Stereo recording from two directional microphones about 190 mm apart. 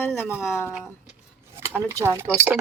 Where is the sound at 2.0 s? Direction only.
15° right (ahead or behind).